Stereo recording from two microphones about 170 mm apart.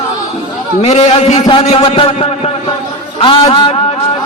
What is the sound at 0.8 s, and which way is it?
A man's voice, 40° left (ahead or behind).